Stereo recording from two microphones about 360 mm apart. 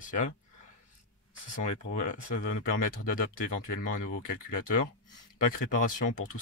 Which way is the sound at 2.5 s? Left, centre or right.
Left.